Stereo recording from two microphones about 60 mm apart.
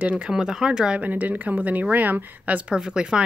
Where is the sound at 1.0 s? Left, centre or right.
Right.